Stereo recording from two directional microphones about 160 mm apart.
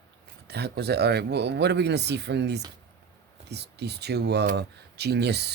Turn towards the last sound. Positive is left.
turn(degrees=-90)